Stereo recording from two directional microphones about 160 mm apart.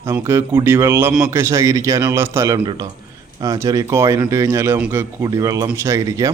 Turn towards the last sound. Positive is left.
turn(degrees=-20)  # may be behind; listen again after turning